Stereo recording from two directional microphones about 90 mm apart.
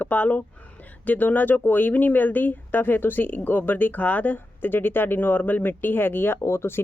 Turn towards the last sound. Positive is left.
turn(degrees=25)  # may be behind; listen again after turning